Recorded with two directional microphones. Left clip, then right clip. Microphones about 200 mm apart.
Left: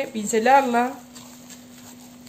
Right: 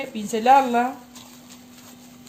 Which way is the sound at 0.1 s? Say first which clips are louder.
Right 1 dB; 20° left (ahead or behind).